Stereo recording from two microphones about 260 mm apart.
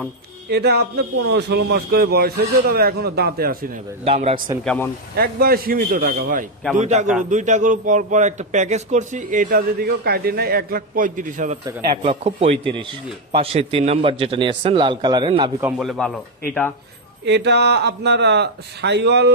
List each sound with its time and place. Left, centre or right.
0.5 s speech: right
4.0 s a man's voice: right
5.1 s a man's voice: right; by 15.5 s centre
15.6 s a man's voice: centre
17.3 s speech: right